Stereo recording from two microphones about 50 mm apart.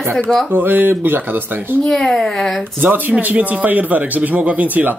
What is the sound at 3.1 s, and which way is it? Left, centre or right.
Speech, right.